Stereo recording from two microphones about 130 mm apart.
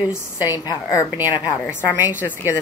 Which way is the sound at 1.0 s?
15° right (ahead or behind).